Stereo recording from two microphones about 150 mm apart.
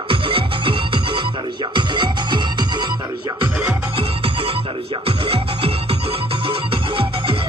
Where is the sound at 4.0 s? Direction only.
40° right (ahead or behind).